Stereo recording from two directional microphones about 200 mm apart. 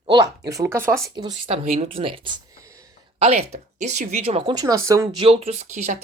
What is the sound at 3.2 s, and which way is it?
Speech, 30° right (ahead or behind).